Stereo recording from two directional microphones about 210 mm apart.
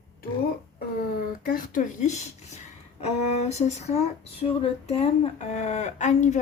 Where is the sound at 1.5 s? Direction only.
40° left (ahead or behind).